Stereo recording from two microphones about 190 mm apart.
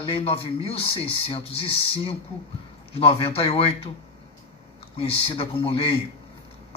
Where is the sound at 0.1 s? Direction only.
30° left (ahead or behind).